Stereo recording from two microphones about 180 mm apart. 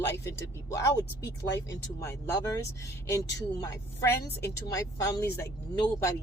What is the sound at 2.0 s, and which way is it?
Speech, 15° left (ahead or behind).